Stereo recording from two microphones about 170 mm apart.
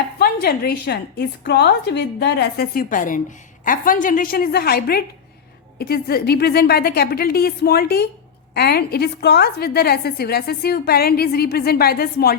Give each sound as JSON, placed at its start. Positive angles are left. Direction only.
{"t": 0.2, "sound": "a woman's voice", "side_deg": 65}